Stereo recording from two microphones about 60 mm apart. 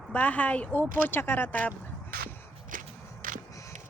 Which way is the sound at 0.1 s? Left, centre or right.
Left.